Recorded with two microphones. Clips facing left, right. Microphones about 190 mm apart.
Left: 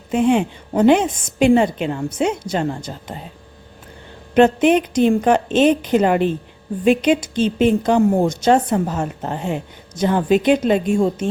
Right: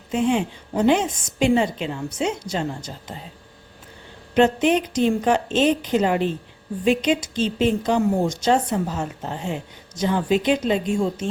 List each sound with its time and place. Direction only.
0.1 s a woman's voice: 60° left (ahead or behind)
4.4 s a woman's voice: 55° left (ahead or behind)